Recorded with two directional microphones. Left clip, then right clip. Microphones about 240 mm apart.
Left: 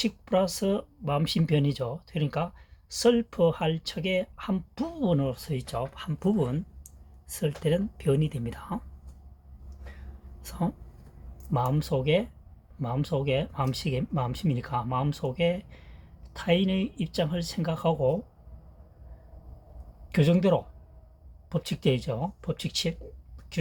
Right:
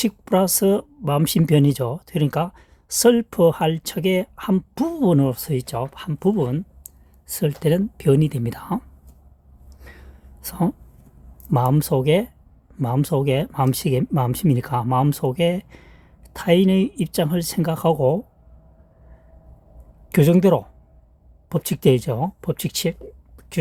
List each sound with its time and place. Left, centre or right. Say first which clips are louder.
0.0 s speech: right 6 dB; right
9.8 s a sound: right 6 dB; right
11.5 s speech: right 8 dB; right
20.1 s speech: right 8 dB; right